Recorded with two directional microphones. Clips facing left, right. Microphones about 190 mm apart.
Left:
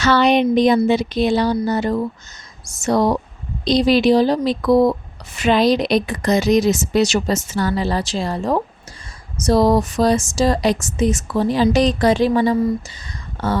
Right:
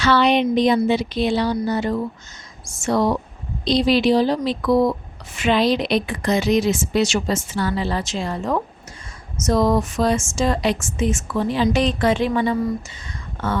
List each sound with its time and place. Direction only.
0.0 s speech: 45° left (ahead or behind)